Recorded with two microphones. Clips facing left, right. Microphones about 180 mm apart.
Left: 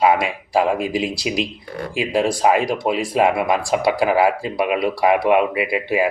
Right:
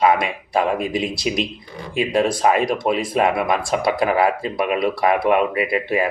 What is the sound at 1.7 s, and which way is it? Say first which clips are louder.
Speech: left 5 dB; 70° left (ahead or behind).